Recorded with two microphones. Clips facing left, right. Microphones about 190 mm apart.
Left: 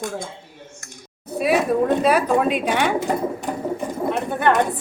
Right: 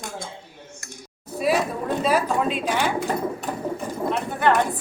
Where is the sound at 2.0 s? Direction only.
65° left (ahead or behind).